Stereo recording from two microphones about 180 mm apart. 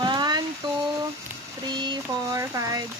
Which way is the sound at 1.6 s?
25° right (ahead or behind).